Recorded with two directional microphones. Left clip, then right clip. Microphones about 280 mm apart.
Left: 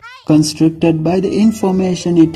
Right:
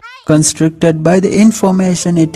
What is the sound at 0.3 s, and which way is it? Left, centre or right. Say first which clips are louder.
Speech: right 1 dB; right.